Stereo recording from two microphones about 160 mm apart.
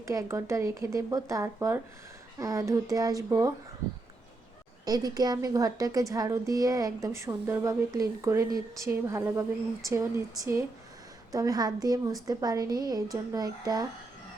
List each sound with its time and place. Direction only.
0.1 s a woman's voice: 20° right (ahead or behind)
4.9 s a woman's voice: 25° right (ahead or behind)